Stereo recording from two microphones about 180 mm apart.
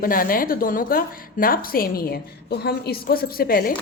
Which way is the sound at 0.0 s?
50° left (ahead or behind).